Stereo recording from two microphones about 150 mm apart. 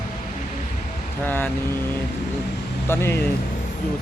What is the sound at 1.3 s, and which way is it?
Speech, 15° left (ahead or behind).